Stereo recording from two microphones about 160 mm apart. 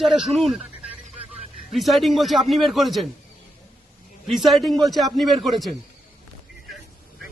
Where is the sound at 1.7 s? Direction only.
Centre (ahead or behind).